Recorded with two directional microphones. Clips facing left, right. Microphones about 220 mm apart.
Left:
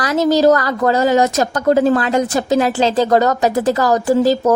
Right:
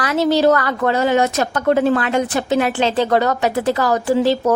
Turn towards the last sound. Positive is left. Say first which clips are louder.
# left 2 dB
turn(degrees=40)  # may be behind; listen again after turning